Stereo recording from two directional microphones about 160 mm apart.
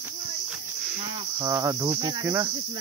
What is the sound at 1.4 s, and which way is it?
Cricket, 20° right (ahead or behind).